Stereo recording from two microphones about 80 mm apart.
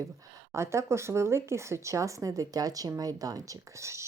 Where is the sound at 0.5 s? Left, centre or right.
Right.